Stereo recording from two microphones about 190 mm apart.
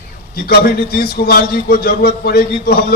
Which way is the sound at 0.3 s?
55° left (ahead or behind).